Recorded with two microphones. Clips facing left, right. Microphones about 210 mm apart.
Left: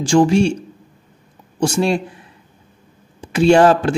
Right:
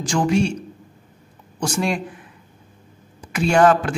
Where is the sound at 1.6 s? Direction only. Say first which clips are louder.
Left 6 dB; 30° left (ahead or behind).